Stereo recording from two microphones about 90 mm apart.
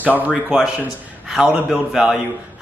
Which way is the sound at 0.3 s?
5° right (ahead or behind).